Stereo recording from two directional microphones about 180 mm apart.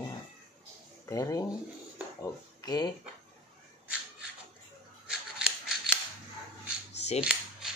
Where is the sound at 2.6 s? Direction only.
25° left (ahead or behind).